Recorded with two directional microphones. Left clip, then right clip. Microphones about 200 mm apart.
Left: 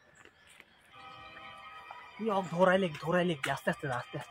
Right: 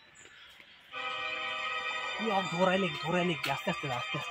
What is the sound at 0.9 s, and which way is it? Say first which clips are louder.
Music: right 14 dB; 50° right (ahead or behind).